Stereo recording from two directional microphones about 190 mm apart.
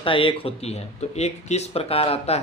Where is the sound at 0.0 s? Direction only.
25° left (ahead or behind).